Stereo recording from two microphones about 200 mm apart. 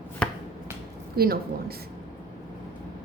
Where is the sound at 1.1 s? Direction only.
50° right (ahead or behind).